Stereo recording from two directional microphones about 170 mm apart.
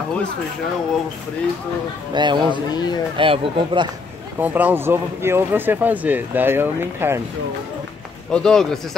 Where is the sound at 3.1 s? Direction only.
30° right (ahead or behind).